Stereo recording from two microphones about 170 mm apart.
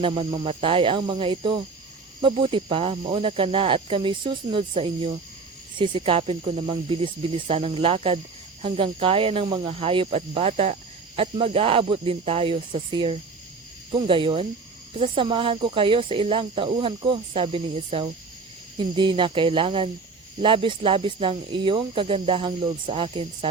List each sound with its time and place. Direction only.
0.0 s speech: 30° right (ahead or behind)